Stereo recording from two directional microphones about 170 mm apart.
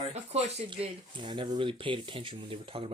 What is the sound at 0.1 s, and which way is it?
Speech, 35° right (ahead or behind).